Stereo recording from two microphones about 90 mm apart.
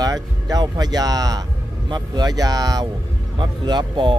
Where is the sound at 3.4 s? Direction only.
55° right (ahead or behind).